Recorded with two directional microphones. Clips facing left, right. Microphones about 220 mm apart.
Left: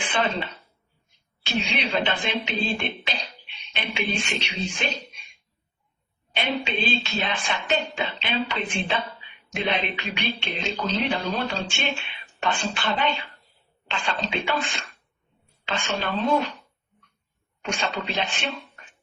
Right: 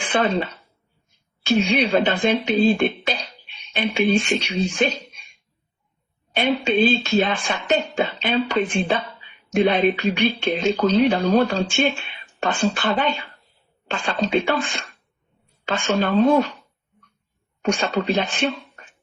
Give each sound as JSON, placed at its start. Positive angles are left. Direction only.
{"t": 0.0, "sound": "speech", "side_deg": -45}
{"t": 1.5, "sound": "speech", "side_deg": -45}
{"t": 6.3, "sound": "speech", "side_deg": -45}
{"t": 15.6, "sound": "speech", "side_deg": -50}
{"t": 17.6, "sound": "speech", "side_deg": -50}